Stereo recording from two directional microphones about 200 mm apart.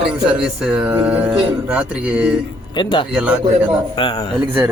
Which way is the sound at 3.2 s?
10° right (ahead or behind).